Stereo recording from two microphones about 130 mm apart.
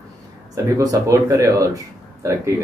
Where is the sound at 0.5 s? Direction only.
25° right (ahead or behind).